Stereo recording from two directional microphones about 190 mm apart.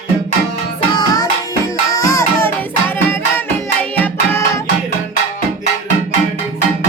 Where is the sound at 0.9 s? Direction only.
20° left (ahead or behind).